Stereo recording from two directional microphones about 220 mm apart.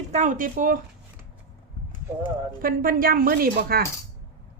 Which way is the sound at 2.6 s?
40° right (ahead or behind).